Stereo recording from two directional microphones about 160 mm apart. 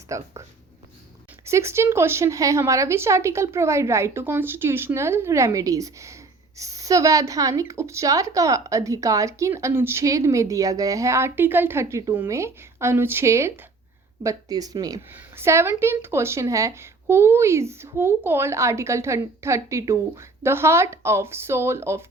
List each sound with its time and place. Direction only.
0.1 s speech: 20° right (ahead or behind)
1.5 s a woman's voice: 15° right (ahead or behind)